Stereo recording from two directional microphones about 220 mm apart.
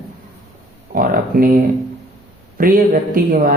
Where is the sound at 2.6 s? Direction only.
40° right (ahead or behind).